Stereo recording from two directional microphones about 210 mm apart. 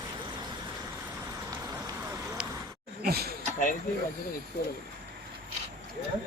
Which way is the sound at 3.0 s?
45° right (ahead or behind).